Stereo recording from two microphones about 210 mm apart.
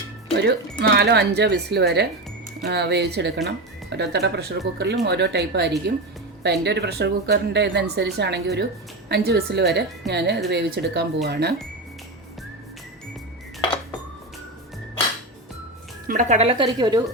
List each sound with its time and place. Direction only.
0.3 s speech: 55° right (ahead or behind)
16.0 s speech: 35° right (ahead or behind); by 17.0 s 20° right (ahead or behind)